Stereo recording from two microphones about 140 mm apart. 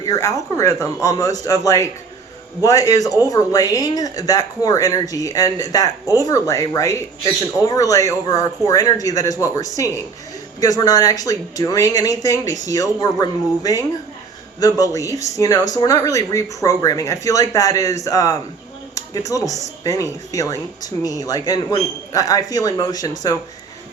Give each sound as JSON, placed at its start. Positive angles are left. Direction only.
{"t": 0.0, "sound": "speech", "side_deg": 25}